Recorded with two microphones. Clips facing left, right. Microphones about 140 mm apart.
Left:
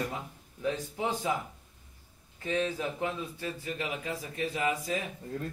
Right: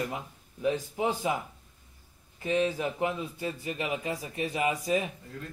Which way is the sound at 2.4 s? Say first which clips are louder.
Right 3 dB; 10° right (ahead or behind).